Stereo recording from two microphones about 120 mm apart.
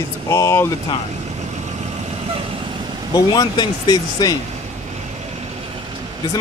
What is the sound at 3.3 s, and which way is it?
Speech, 35° left (ahead or behind).